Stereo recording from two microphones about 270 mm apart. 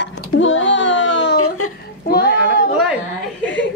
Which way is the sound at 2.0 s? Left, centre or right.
Left.